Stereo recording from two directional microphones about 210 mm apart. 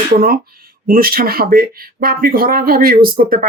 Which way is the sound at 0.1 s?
45° right (ahead or behind).